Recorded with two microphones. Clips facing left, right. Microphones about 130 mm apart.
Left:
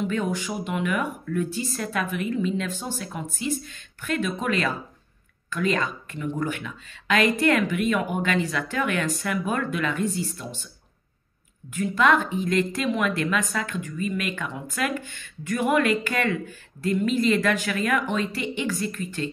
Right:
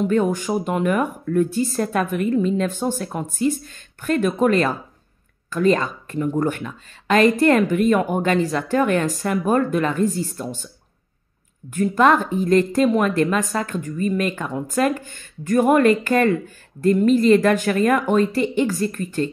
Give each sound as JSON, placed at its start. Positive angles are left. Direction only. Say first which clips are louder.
{"t": 0.0, "sound": "a woman's voice", "louder": "right 7 dB", "side_deg": -45}
{"t": 11.7, "sound": "a woman's voice", "louder": "right 5 dB", "side_deg": -45}